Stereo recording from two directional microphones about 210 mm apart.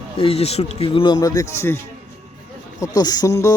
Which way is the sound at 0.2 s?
30° left (ahead or behind).